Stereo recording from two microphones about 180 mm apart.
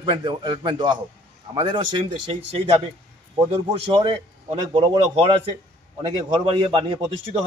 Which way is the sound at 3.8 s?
30° right (ahead or behind).